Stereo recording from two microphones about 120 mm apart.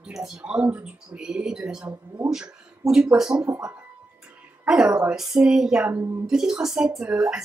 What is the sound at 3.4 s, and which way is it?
Speech, 25° right (ahead or behind).